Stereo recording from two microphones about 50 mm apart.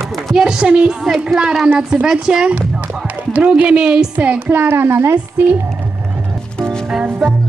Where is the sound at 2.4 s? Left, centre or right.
Right.